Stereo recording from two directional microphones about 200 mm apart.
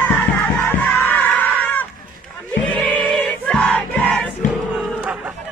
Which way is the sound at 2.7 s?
5° left (ahead or behind).